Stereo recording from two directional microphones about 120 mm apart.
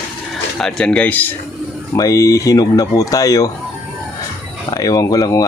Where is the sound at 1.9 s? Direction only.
30° left (ahead or behind).